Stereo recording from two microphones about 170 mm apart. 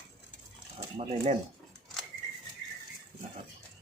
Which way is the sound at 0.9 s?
40° right (ahead or behind).